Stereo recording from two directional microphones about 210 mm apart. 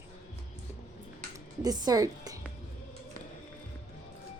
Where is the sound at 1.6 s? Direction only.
20° right (ahead or behind).